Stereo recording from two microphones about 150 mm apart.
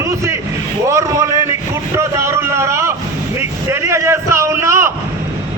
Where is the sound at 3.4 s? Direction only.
20° right (ahead or behind).